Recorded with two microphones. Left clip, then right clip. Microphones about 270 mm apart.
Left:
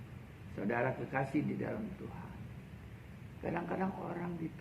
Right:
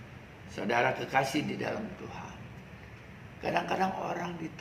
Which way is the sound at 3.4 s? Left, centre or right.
Right.